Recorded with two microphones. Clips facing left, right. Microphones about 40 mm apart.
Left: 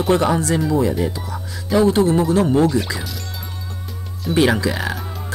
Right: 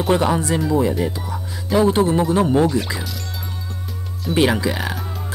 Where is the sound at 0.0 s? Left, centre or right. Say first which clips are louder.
Left 1 dB; centre.